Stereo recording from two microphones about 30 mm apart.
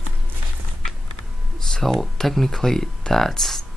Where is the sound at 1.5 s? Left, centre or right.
Centre.